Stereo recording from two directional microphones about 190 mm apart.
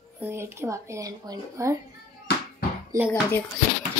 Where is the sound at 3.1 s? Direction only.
10° left (ahead or behind).